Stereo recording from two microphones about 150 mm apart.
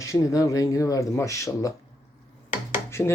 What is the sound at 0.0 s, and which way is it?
Speech, 20° left (ahead or behind).